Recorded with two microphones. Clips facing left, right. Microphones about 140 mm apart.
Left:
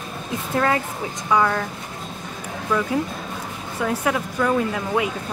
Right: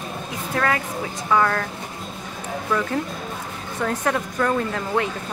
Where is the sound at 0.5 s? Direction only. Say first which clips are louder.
Left 2 dB; 25° left (ahead or behind).